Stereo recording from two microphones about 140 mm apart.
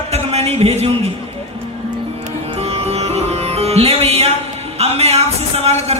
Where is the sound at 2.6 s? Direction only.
45° right (ahead or behind).